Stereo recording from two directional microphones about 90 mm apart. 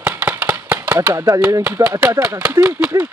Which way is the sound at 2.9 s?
40° right (ahead or behind).